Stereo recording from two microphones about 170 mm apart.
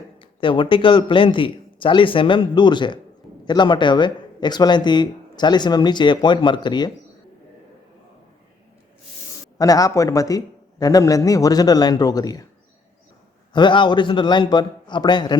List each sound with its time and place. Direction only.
0.2 s speech: 30° left (ahead or behind)
9.6 s speech: 20° left (ahead or behind)
13.5 s speech: 25° left (ahead or behind)